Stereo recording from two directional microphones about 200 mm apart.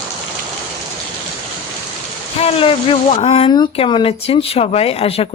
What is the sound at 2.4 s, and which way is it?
Speech, 30° left (ahead or behind).